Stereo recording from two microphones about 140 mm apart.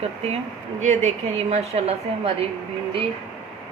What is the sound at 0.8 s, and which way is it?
A woman's voice, 55° right (ahead or behind).